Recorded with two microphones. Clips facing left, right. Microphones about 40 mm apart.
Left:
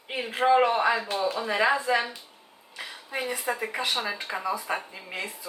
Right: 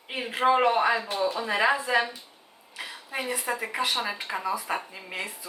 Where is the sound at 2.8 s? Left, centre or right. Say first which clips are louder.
Left 1 dB; centre.